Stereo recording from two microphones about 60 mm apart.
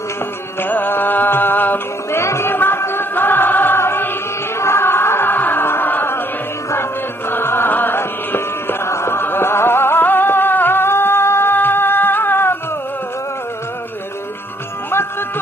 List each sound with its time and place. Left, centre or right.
0.6 s music: left
2.2 s music: left
4.6 s a sound: left
7.3 s music: left
8.8 s music: left